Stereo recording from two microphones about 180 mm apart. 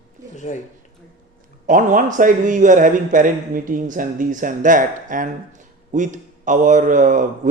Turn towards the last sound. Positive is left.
turn(degrees=-45)  # may be behind; listen again after turning